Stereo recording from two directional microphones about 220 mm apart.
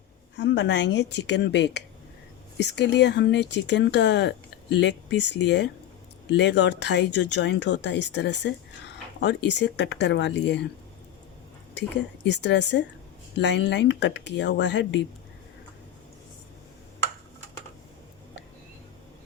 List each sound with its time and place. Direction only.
0.3 s speech: 55° left (ahead or behind)
11.7 s speech: 55° left (ahead or behind)